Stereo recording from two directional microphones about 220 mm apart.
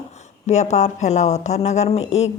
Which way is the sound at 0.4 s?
30° left (ahead or behind).